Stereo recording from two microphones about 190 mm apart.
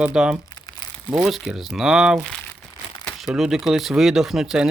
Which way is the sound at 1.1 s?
Centre (ahead or behind).